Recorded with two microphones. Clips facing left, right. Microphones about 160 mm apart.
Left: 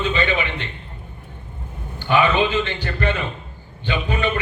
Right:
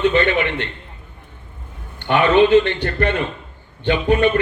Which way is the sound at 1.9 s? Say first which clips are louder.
Right 4 dB; 65° right (ahead or behind).